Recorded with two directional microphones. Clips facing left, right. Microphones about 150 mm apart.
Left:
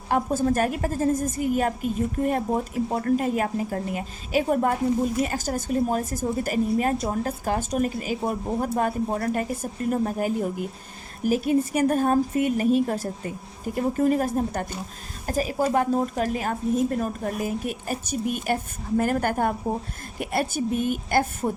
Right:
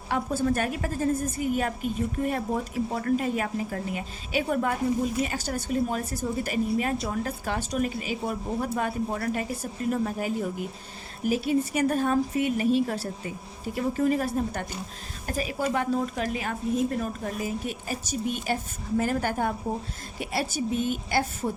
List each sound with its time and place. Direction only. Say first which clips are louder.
0.1 s a woman's voice: left 3 dB; 40° left (ahead or behind)